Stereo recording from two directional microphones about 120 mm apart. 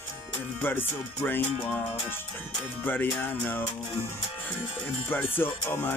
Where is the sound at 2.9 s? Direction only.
15° left (ahead or behind).